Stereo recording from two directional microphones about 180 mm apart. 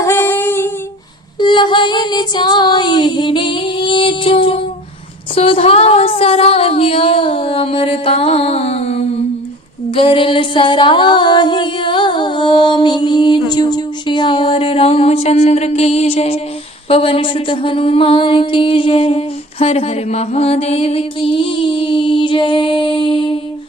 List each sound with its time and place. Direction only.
0.0 s a sound: 15° left (ahead or behind)
1.4 s child singing: 25° left (ahead or behind)
5.3 s speech: 30° left (ahead or behind)
9.9 s music: 30° left (ahead or behind)